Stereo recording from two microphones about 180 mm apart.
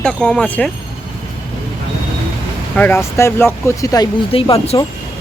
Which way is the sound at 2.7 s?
10° left (ahead or behind).